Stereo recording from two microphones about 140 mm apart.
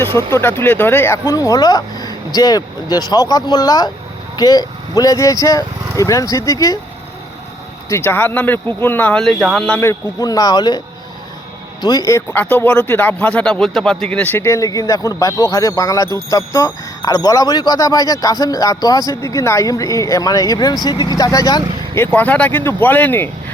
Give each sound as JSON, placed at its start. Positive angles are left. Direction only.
{"t": 0.2, "sound": "speech", "side_deg": 20}
{"t": 7.9, "sound": "speech", "side_deg": 15}
{"t": 9.8, "sound": "speech", "side_deg": 25}
{"t": 11.8, "sound": "speech", "side_deg": 30}
{"t": 12.3, "sound": "speech", "side_deg": 15}